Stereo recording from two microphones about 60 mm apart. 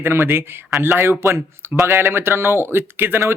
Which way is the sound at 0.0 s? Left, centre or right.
Right.